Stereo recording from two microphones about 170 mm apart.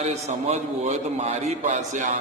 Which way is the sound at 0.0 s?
40° right (ahead or behind).